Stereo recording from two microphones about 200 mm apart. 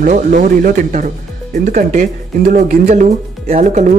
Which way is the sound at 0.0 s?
40° right (ahead or behind).